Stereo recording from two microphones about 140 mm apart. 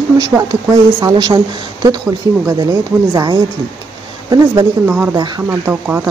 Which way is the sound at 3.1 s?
30° right (ahead or behind).